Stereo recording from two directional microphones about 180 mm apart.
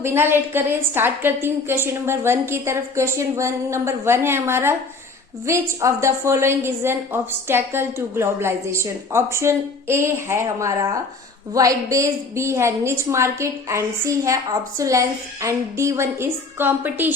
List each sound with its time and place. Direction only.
0.0 s a woman's voice: 15° right (ahead or behind)